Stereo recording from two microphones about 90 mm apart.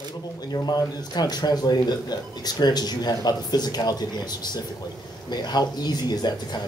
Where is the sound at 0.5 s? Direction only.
50° left (ahead or behind).